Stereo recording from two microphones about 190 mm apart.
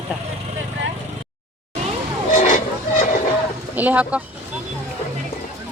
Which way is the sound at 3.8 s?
10° right (ahead or behind).